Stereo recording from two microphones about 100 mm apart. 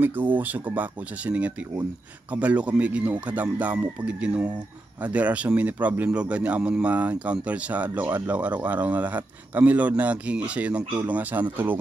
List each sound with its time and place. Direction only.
0.0 s speech: 20° right (ahead or behind)